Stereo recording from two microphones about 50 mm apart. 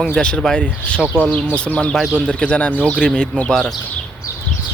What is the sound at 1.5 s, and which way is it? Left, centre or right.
Speech, left.